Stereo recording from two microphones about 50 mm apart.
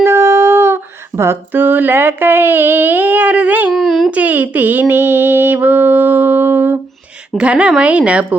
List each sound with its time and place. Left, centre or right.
0.0 s humming: right
1.5 s mantra: right
3.7 s speech: centre
4.1 s mantra: right
7.3 s a woman's voice: right